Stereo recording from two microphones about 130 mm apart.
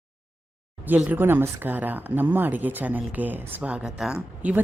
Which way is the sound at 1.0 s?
15° right (ahead or behind).